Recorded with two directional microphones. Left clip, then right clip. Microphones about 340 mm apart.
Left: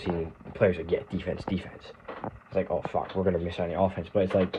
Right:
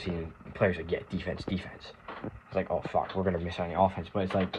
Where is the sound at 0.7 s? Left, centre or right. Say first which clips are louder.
Left 4 dB; centre.